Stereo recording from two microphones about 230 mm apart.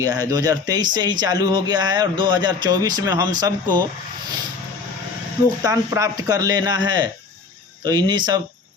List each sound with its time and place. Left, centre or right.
0.0 s speech: centre
5.6 s speech: centre